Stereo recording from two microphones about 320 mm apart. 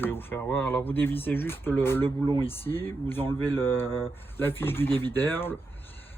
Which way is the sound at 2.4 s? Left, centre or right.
Centre.